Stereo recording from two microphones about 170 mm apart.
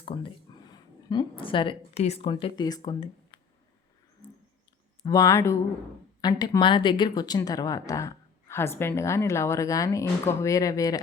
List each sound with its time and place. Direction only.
0.0 s a woman's voice: 25° left (ahead or behind)
5.0 s speech: 20° left (ahead or behind)